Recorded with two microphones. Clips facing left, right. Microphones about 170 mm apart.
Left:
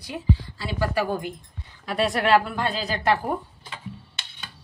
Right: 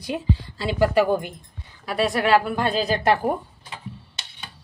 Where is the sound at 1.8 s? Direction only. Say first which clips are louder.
Right 1 dB; 5° right (ahead or behind).